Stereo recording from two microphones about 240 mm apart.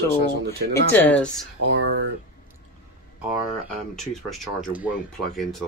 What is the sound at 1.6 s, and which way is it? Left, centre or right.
Speech, right.